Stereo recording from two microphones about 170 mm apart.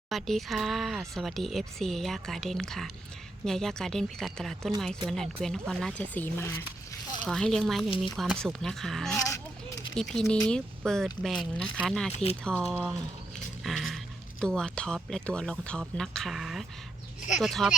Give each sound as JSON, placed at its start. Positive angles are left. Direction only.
{"t": 0.1, "sound": "speech", "side_deg": 0}
{"t": 7.3, "sound": "speech", "side_deg": 5}
{"t": 9.1, "sound": "a sound", "side_deg": 20}
{"t": 9.9, "sound": "speech", "side_deg": 0}
{"t": 12.1, "sound": "speech", "side_deg": 40}
{"t": 12.7, "sound": "speech", "side_deg": -10}
{"t": 13.7, "sound": "a sound", "side_deg": 0}
{"t": 14.4, "sound": "speech", "side_deg": 5}